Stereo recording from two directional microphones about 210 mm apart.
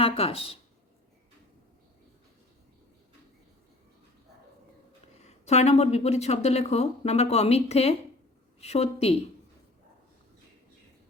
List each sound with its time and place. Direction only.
0.0 s speech: 25° left (ahead or behind)
5.1 s speech: 30° left (ahead or behind)